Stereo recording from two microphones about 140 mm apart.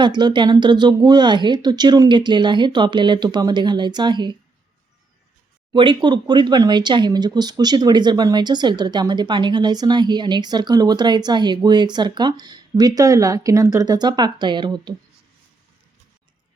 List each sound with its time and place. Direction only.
0.0 s speech: 30° right (ahead or behind)
5.7 s speech: 35° right (ahead or behind)